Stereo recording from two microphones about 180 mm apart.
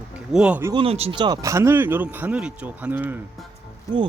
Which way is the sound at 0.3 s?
5° right (ahead or behind).